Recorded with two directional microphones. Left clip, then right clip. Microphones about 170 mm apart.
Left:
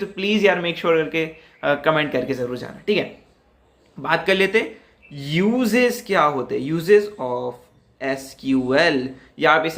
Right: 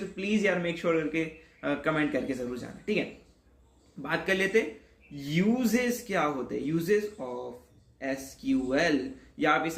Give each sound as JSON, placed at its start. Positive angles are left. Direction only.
{"t": 0.2, "sound": "speech", "side_deg": 15}
{"t": 4.0, "sound": "speech", "side_deg": 20}